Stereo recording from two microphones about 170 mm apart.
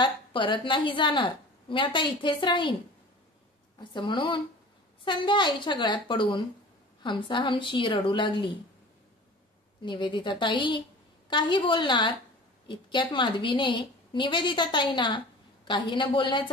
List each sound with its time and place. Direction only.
0.0 s a woman's voice: 30° left (ahead or behind)
3.9 s a woman's voice: 25° left (ahead or behind)
9.8 s a woman's voice: 30° left (ahead or behind)